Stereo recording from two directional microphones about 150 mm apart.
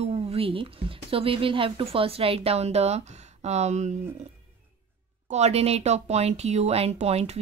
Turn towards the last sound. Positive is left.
turn(degrees=-45)  # may be behind; listen again after turning